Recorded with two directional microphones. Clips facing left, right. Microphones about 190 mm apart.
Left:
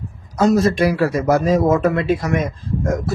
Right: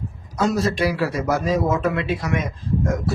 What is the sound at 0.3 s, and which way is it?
Speech, 45° left (ahead or behind).